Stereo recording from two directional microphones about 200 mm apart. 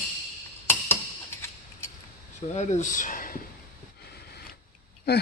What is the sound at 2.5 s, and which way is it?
Speech, 35° left (ahead or behind).